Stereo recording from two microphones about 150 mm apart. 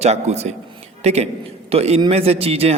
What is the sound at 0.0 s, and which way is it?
A man's voice, 45° right (ahead or behind).